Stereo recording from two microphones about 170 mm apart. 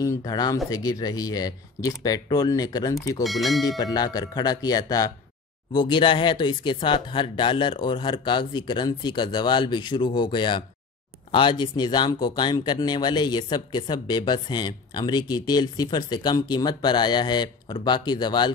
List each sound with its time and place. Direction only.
0.0 s speech: 20° left (ahead or behind)
3.3 s speech: centre (ahead or behind)
3.7 s speech: 25° left (ahead or behind)